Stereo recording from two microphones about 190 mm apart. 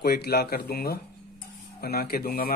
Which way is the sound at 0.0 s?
55° left (ahead or behind).